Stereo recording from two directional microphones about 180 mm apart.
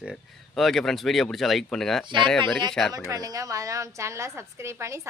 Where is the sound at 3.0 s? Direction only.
20° right (ahead or behind).